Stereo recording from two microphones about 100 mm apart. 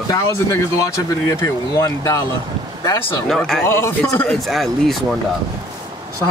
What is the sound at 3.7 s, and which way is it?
Speech, 25° left (ahead or behind).